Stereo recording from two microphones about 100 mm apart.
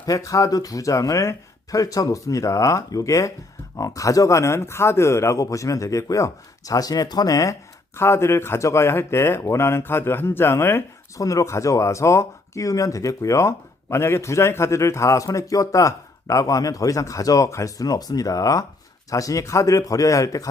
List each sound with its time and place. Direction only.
0.0 s speech: 35° left (ahead or behind)